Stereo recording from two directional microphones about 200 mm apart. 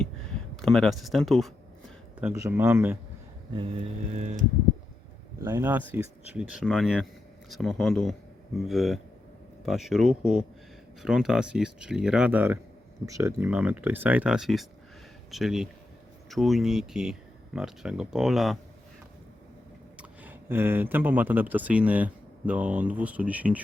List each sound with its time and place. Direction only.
0.5 s speech: centre (ahead or behind)
2.2 s speech: 10° right (ahead or behind)
4.1 s a sound: 35° right (ahead or behind)
5.4 s speech: 15° right (ahead or behind)
20.0 s speech: 10° right (ahead or behind)